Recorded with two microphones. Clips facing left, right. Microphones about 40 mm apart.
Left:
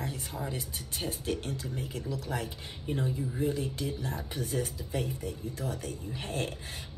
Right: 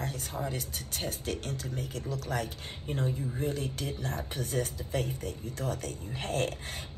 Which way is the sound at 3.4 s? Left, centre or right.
Right.